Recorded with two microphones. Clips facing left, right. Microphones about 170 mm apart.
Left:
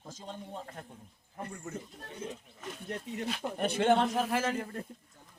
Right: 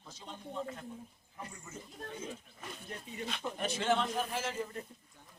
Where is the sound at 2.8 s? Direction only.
75° left (ahead or behind).